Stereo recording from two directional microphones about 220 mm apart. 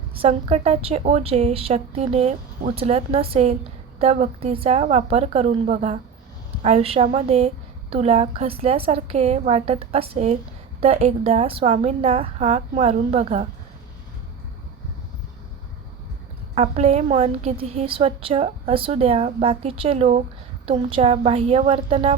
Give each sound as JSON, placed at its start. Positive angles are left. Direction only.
{"t": 0.1, "sound": "a woman's voice", "side_deg": -25}
{"t": 16.6, "sound": "a woman's voice", "side_deg": -30}